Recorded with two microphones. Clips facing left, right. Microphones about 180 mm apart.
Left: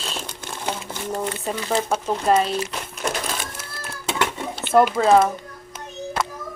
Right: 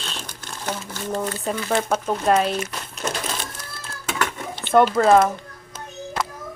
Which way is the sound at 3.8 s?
25° left (ahead or behind).